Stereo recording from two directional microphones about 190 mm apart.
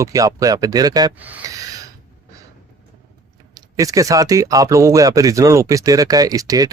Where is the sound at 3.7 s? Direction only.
20° right (ahead or behind).